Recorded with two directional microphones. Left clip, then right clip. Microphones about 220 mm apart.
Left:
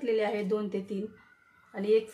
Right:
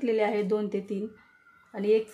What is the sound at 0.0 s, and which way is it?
Speech, 30° right (ahead or behind).